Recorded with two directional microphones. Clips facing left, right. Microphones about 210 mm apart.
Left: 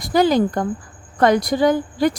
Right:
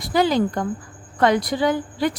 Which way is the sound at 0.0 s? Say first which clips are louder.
Left 3 dB; 45° left (ahead or behind).